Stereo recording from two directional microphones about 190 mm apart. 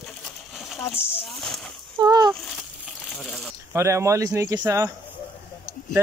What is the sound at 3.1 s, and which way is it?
Speech, centre (ahead or behind).